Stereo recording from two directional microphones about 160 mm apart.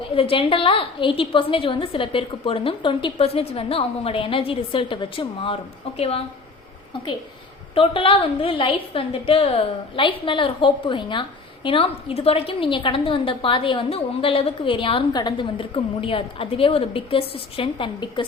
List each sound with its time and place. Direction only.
0.1 s a woman's voice: 35° left (ahead or behind)
7.8 s a woman's voice: 35° left (ahead or behind)